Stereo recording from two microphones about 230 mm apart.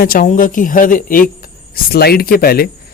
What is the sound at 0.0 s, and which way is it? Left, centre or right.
Speech, left.